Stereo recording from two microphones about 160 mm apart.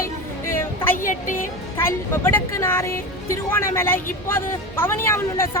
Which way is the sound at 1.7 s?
15° left (ahead or behind).